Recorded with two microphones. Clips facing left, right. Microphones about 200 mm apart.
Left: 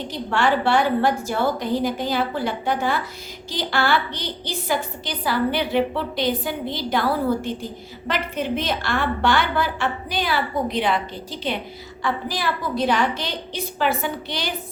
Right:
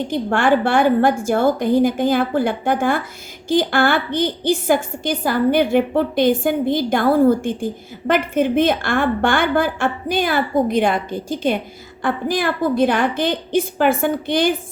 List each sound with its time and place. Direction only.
0.1 s a woman's voice: 50° right (ahead or behind)